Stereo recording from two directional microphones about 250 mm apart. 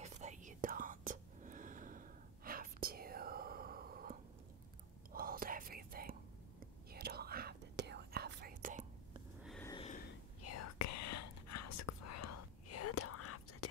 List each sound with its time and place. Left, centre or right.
0.0 s whispering: right
9.4 s sniff: centre
9.7 s snort: left
10.4 s whispering: left